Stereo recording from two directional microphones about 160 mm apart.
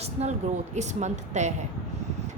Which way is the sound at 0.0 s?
40° right (ahead or behind).